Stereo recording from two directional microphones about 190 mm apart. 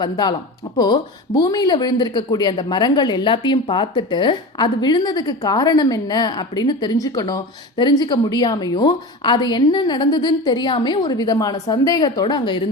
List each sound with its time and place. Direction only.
0.0 s speech: 20° left (ahead or behind)